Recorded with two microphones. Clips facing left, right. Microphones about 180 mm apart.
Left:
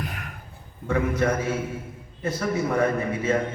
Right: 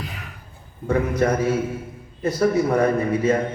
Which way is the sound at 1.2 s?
35° right (ahead or behind).